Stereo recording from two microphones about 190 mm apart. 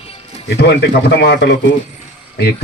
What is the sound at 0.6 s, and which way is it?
Speech, 60° left (ahead or behind).